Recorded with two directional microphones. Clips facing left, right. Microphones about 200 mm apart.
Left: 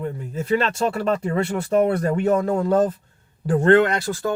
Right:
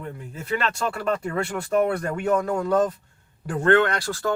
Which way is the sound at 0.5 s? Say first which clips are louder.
Left 5 dB; 25° left (ahead or behind).